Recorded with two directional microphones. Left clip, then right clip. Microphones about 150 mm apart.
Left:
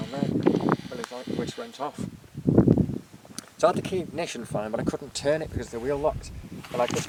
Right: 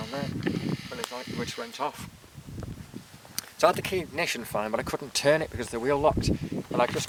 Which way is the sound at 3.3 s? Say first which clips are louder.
Even; 25° right (ahead or behind).